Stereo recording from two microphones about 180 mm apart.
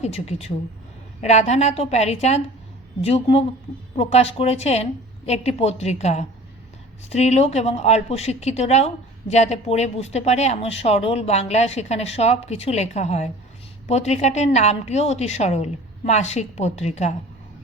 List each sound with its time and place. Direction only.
0.0 s speech: 35° left (ahead or behind)